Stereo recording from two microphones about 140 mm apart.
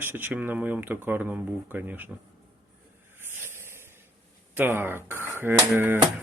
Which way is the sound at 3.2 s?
15° right (ahead or behind).